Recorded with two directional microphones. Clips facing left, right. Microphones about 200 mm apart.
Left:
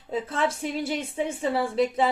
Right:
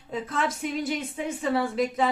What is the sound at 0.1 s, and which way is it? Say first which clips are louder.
A woman's voice: left 2 dB; 30° left (ahead or behind).